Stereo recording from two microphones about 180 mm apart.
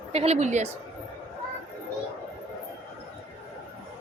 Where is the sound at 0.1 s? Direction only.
35° right (ahead or behind).